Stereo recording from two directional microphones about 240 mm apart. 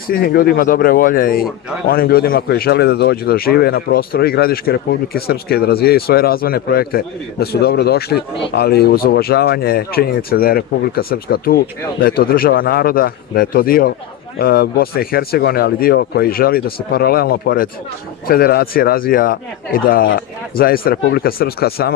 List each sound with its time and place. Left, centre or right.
0.1 s speech: left